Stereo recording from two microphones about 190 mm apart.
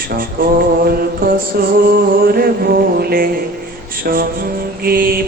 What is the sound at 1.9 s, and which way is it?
Music, 50° right (ahead or behind).